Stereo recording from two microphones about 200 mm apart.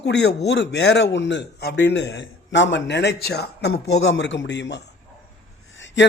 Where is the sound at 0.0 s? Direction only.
60° left (ahead or behind).